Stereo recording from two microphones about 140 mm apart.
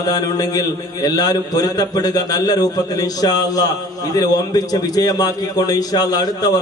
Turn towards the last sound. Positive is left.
turn(degrees=25)  # may be behind; listen again after turning